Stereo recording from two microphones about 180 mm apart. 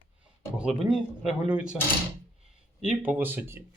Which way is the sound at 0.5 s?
5° right (ahead or behind).